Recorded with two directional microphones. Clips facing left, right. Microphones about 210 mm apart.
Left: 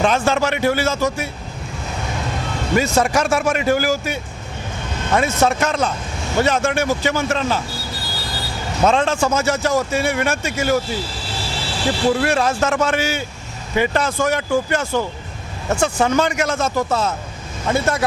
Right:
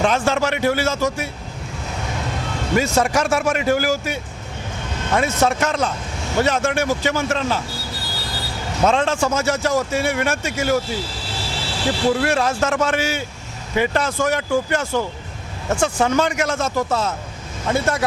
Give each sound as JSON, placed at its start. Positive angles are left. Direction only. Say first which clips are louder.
{"t": 0.0, "sound": "speech", "louder": "left 1 dB", "side_deg": 15}
{"t": 4.8, "sound": "vehicle", "louder": "left 1 dB", "side_deg": 15}
{"t": 5.4, "sound": "speech", "louder": "left 1 dB", "side_deg": 15}